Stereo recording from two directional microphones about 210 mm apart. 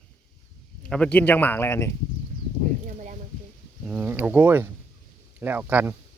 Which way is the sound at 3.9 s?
5° right (ahead or behind).